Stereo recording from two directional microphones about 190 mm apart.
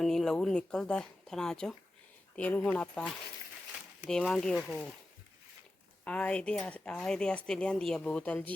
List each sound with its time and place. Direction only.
0.0 s speech: centre (ahead or behind)
6.1 s speech: 5° left (ahead or behind)